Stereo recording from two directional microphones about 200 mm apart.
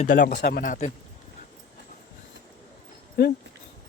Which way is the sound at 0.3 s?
55° left (ahead or behind).